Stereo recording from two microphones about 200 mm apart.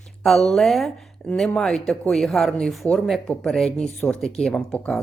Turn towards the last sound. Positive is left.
turn(degrees=5)  # may be behind; listen again after turning